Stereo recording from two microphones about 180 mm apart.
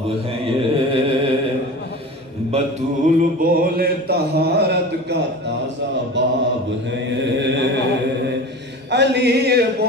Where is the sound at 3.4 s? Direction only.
50° right (ahead or behind).